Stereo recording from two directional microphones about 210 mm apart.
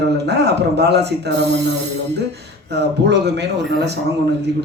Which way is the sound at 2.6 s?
55° right (ahead or behind).